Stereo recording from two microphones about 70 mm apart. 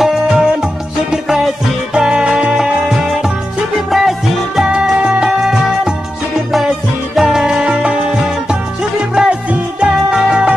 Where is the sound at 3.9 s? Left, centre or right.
Centre.